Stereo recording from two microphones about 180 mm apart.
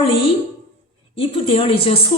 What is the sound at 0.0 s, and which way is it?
A woman's voice, 30° left (ahead or behind).